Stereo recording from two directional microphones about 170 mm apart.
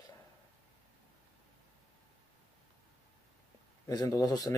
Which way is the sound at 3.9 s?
20° left (ahead or behind).